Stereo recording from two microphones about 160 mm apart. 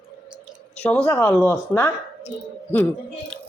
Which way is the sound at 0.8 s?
5° left (ahead or behind).